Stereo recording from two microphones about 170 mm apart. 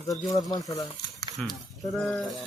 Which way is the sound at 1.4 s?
Centre (ahead or behind).